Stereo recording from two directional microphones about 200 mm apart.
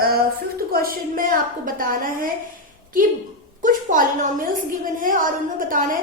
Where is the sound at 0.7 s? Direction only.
45° right (ahead or behind).